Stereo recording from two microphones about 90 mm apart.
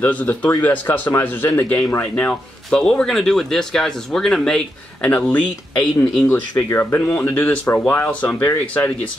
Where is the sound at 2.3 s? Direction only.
5° left (ahead or behind).